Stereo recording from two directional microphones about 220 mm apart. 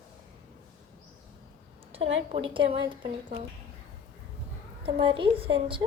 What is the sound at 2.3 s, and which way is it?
Speech, 25° right (ahead or behind).